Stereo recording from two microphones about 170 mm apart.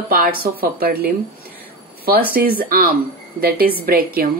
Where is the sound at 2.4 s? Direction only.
60° right (ahead or behind).